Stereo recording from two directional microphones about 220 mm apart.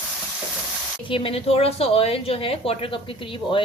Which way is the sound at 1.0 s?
25° left (ahead or behind).